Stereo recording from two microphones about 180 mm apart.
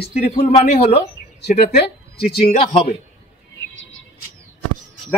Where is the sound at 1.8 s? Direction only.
60° left (ahead or behind).